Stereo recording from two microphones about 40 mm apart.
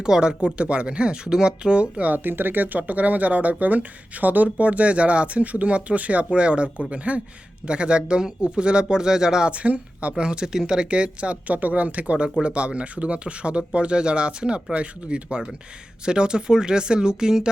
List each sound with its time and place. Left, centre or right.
0.0 s speech: centre
2.1 s speech: right; by 9.5 s centre
9.5 s speech: right
10.2 s speech: centre
10.8 s speech: right